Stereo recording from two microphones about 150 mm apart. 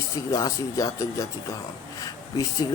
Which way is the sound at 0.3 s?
25° left (ahead or behind).